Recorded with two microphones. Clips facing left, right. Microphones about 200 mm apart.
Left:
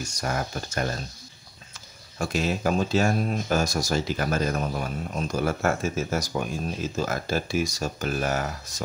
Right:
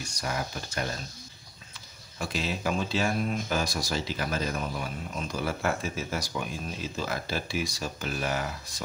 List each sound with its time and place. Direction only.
0.0 s speech: 45° left (ahead or behind)
2.1 s speech: 45° left (ahead or behind)